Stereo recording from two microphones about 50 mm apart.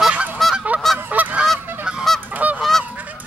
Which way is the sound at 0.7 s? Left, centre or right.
Right.